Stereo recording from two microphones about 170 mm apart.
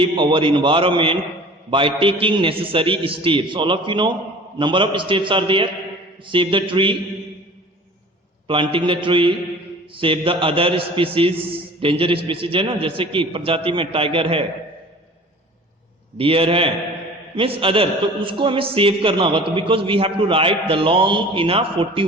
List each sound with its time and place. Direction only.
0.0 s a man's voice: 30° right (ahead or behind)
8.4 s a man's voice: 30° right (ahead or behind)
16.1 s a man's voice: 35° right (ahead or behind)